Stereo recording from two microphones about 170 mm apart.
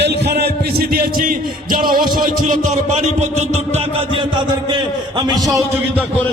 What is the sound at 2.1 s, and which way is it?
Speech, 50° right (ahead or behind).